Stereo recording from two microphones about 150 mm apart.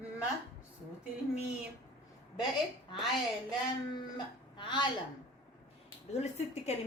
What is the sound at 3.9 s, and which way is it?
Speech, 30° left (ahead or behind).